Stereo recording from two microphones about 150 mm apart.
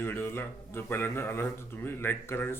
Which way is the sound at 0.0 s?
15° left (ahead or behind).